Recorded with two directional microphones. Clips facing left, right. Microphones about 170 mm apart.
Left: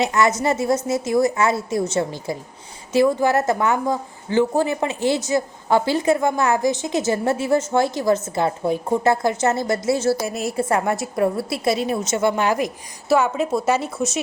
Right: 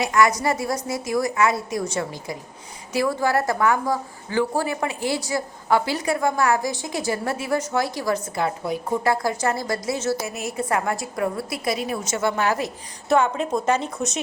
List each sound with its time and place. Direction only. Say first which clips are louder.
0.0 s speech: left 1 dB; 25° left (ahead or behind); by 14.2 s 5° left (ahead or behind)